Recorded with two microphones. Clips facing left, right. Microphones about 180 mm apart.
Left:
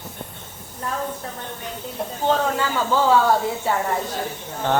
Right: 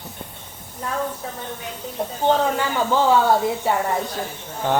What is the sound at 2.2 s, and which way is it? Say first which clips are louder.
Speech: right 2 dB; 20° right (ahead or behind).